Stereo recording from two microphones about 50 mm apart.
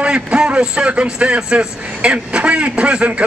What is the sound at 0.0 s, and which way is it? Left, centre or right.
A man's voice, right.